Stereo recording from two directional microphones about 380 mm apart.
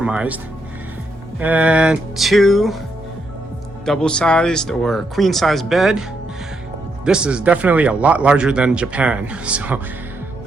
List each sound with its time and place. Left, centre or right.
0.0 s speech: centre
1.4 s speech: centre
3.8 s speech: centre